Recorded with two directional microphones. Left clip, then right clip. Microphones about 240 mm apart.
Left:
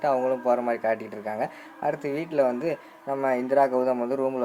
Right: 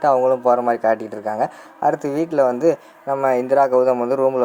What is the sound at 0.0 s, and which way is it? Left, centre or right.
Speech, right.